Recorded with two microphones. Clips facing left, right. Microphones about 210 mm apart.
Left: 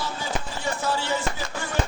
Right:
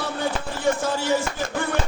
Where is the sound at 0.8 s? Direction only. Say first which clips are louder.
Right 3 dB; 50° right (ahead or behind).